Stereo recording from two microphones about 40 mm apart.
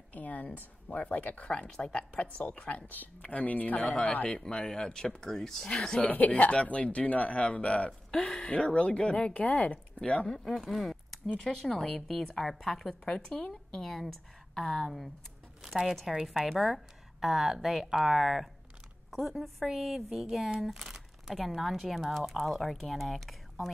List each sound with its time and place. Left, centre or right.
0.1 s a woman's voice: left
1.4 s speech: left
4.3 s speech: centre
6.0 s speech: left
9.3 s speech: left
10.2 s speech: centre
10.5 s a woman's voice: centre
15.6 s a woman's voice: centre
20.7 s crumpling: centre
21.4 s a woman's voice: centre